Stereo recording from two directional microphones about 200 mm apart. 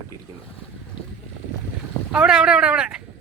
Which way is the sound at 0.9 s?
25° left (ahead or behind).